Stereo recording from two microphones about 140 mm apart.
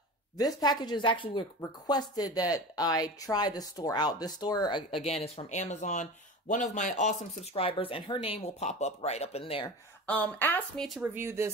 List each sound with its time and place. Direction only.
0.4 s speech: 30° left (ahead or behind)
5.0 s speech: 50° left (ahead or behind)
7.6 s speech: 40° left (ahead or behind)
8.5 s speech: 55° left (ahead or behind)
10.0 s speech: 10° left (ahead or behind)
11.0 s speech: 15° right (ahead or behind)